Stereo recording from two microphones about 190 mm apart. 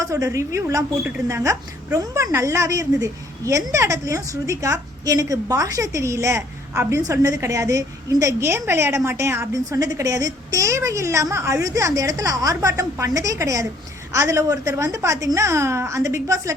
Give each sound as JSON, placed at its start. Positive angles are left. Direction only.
{"t": 0.0, "sound": "speech", "side_deg": -15}